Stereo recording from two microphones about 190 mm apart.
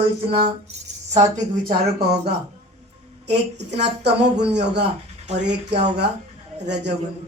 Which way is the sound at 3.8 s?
65° right (ahead or behind).